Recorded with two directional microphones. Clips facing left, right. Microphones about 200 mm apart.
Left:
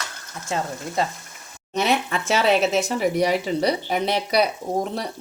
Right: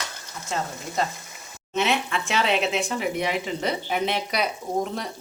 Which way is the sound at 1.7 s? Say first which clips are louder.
Left 2 dB; 40° left (ahead or behind).